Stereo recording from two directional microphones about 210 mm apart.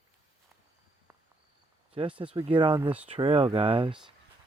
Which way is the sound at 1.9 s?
25° right (ahead or behind).